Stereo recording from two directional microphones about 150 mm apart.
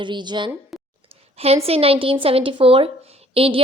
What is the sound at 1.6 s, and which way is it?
Speech, 40° right (ahead or behind).